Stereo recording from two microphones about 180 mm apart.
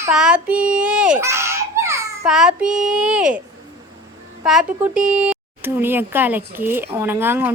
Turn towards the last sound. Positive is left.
turn(degrees=-10)  # may be behind; listen again after turning